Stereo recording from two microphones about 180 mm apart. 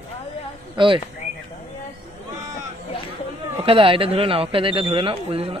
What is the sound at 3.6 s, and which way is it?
Speech, 30° right (ahead or behind).